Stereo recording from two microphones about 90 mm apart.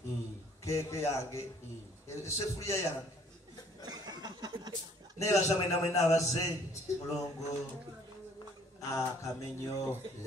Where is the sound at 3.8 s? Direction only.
50° right (ahead or behind).